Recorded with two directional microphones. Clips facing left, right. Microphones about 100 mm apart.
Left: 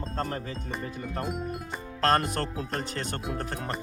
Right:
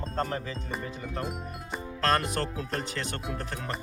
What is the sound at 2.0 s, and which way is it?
Speech, 40° left (ahead or behind).